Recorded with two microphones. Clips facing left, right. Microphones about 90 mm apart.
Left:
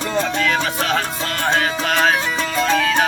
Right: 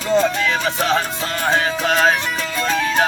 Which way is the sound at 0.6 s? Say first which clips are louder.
Right 2 dB; 25° right (ahead or behind).